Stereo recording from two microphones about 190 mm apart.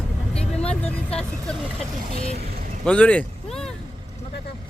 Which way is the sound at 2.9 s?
5° left (ahead or behind).